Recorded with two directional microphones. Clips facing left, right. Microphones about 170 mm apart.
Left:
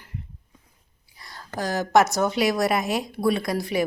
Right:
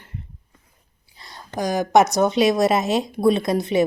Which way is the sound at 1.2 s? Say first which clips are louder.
Right 4 dB; 20° right (ahead or behind).